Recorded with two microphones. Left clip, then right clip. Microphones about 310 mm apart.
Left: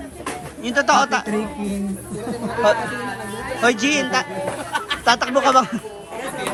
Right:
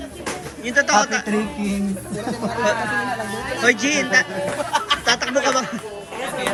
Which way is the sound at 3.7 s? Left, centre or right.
Centre.